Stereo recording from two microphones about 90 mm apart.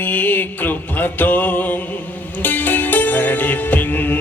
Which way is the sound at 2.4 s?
20° left (ahead or behind).